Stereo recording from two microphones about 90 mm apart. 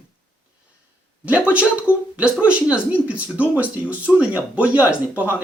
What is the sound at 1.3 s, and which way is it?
Speech, 15° right (ahead or behind).